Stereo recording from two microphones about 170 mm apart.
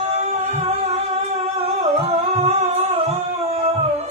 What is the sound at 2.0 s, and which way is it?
Music, 35° right (ahead or behind).